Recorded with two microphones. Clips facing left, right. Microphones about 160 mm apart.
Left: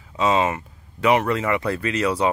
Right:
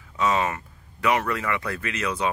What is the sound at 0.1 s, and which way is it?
Speech, 25° left (ahead or behind).